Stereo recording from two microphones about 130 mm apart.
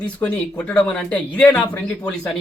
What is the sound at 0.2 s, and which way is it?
Speech, 20° left (ahead or behind).